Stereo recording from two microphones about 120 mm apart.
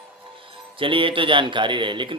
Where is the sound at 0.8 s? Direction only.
45° right (ahead or behind).